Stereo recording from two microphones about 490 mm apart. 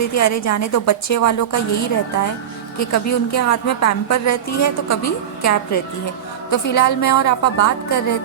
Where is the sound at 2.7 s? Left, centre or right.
Left.